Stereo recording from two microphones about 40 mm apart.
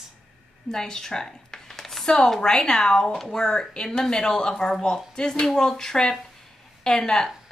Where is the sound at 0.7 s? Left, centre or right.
Centre.